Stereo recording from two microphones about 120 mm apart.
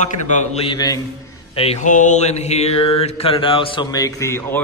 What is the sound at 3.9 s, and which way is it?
Speech, 25° left (ahead or behind).